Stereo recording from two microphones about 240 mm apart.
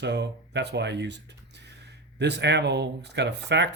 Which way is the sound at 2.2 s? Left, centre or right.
Right.